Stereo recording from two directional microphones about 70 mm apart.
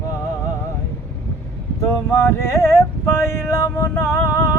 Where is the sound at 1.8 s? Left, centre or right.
Left.